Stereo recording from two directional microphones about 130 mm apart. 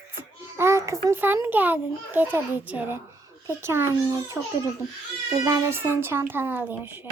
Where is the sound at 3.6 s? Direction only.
20° right (ahead or behind).